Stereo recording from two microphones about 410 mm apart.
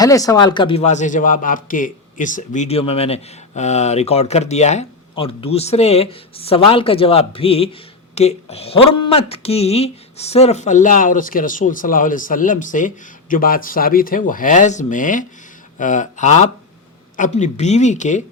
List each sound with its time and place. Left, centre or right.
0.0 s a man's voice: centre